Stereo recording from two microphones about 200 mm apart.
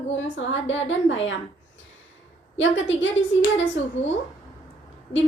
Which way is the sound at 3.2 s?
70° left (ahead or behind).